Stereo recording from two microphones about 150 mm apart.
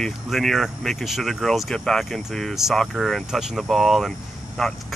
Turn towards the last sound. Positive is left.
turn(degrees=5)  # may be behind; listen again after turning